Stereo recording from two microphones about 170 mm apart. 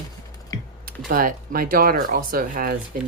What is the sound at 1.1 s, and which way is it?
Speech, 55° right (ahead or behind).